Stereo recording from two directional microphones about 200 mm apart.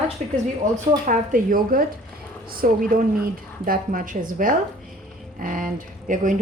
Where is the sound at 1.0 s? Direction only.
40° right (ahead or behind).